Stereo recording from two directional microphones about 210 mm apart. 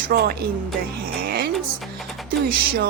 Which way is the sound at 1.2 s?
50° right (ahead or behind).